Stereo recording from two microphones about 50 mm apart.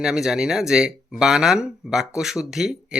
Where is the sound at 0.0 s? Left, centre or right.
Centre.